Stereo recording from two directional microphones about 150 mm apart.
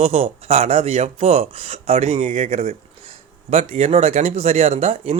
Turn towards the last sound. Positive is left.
turn(degrees=-40)  # may be behind; listen again after turning